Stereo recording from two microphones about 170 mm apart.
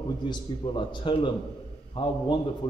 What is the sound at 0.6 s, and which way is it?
A man's voice, 30° left (ahead or behind).